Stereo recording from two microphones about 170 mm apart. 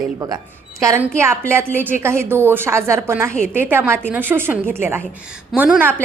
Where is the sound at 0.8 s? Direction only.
15° right (ahead or behind).